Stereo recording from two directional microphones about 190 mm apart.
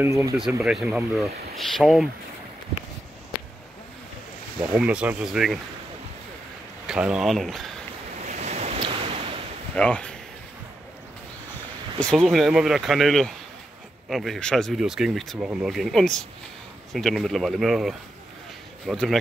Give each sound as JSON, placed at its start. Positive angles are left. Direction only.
{"t": 0.0, "sound": "speech", "side_deg": -15}
{"t": 0.4, "sound": "speech", "side_deg": -5}
{"t": 4.7, "sound": "speech", "side_deg": -5}
{"t": 6.9, "sound": "speech", "side_deg": -5}
{"t": 8.3, "sound": "waves", "side_deg": -35}
{"t": 9.8, "sound": "speech", "side_deg": 5}
{"t": 12.0, "sound": "speech", "side_deg": 5}